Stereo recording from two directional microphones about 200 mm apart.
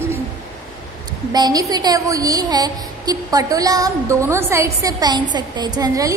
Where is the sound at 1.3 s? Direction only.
20° right (ahead or behind).